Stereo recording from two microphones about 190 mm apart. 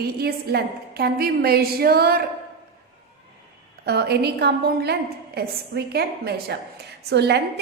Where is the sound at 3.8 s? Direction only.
60° right (ahead or behind).